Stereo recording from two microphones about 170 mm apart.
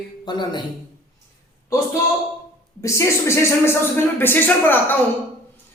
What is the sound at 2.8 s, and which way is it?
A man's voice, 15° left (ahead or behind).